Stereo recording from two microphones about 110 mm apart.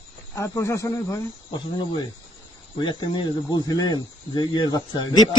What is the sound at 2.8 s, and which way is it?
Speech, 45° left (ahead or behind).